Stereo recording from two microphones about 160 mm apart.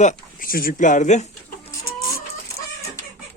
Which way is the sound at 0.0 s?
55° left (ahead or behind).